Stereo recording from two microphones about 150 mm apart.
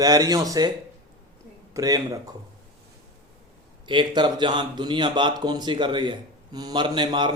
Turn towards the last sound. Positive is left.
turn(degrees=-30)  # may be behind; listen again after turning